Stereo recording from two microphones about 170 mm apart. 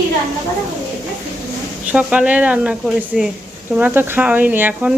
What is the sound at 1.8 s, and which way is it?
A woman's voice, 5° right (ahead or behind).